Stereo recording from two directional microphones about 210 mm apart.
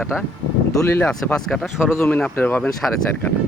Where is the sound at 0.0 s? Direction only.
Centre (ahead or behind).